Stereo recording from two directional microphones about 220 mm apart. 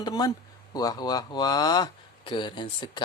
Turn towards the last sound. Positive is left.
turn(degrees=20)  # may be behind; listen again after turning